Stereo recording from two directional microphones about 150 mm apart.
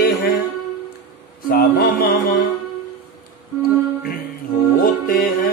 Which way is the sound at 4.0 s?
70° left (ahead or behind).